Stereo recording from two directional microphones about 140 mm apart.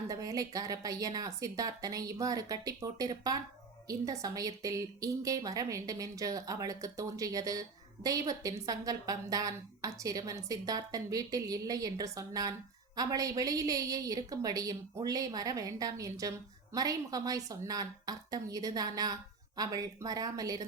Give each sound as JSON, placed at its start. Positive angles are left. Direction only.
{"t": 0.1, "sound": "a woman's voice", "side_deg": -25}